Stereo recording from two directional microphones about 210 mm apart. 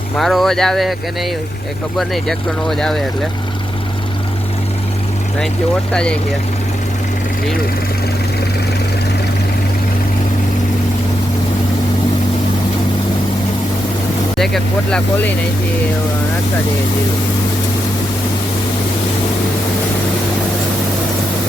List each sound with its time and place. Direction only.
0.2 s speech: centre (ahead or behind)
2.0 s speech: centre (ahead or behind)
5.9 s speech: 5° left (ahead or behind)
14.3 s speech: centre (ahead or behind)